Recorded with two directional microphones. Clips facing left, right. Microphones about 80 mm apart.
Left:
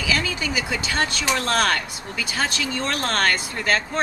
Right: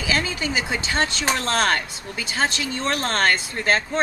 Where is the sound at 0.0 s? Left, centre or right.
Right.